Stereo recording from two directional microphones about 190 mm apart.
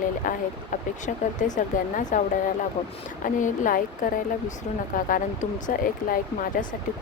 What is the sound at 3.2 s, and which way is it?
Speech, 45° left (ahead or behind).